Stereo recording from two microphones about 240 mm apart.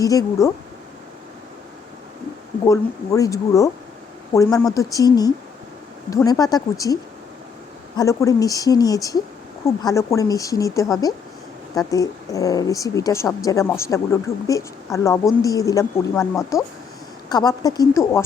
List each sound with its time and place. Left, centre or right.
0.0 s a woman's voice: centre
2.6 s a woman's voice: centre
17.2 s a woman's voice: centre